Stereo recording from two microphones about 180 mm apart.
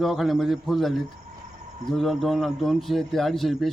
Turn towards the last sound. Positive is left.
turn(degrees=0)  # may be behind; listen again after turning